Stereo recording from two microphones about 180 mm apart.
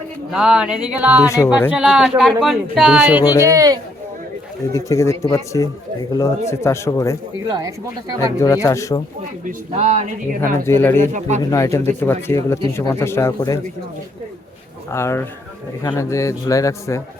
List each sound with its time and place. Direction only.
0.3 s speech: 5° right (ahead or behind)
3.4 s speech: 20° right (ahead or behind)
4.7 s speech: 15° left (ahead or behind)
7.4 s speech: 20° right (ahead or behind)
8.2 s speech: 15° left (ahead or behind)
9.5 s speech: 40° right (ahead or behind)
10.7 s speech: 15° left (ahead or behind)
11.0 s speech: 45° right (ahead or behind)
11.5 s speech: 15° left (ahead or behind)
14.8 s speech: 15° left (ahead or behind)